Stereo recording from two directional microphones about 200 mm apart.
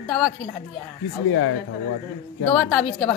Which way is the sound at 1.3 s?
90° left.